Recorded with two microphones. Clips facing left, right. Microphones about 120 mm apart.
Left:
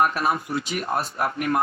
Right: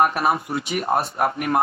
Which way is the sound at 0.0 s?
25° right (ahead or behind).